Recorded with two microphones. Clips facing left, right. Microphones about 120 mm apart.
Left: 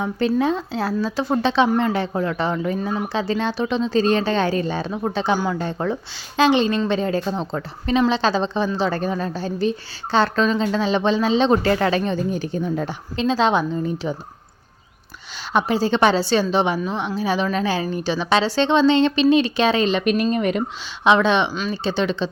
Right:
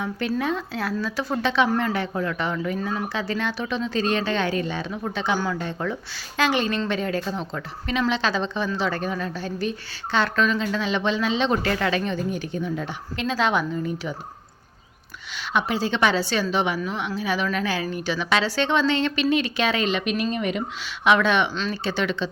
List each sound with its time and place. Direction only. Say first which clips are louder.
0.0 s a woman's voice: left 6 dB; 30° left (ahead or behind)
13.2 s speech: left 4 dB; 25° left (ahead or behind)
15.5 s a woman's voice: left 5 dB; 35° left (ahead or behind)
20.1 s speech: left 6 dB; 45° left (ahead or behind)
21.0 s speech: left 3 dB; 25° left (ahead or behind)